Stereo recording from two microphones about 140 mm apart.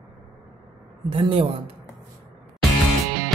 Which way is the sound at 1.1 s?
40° right (ahead or behind).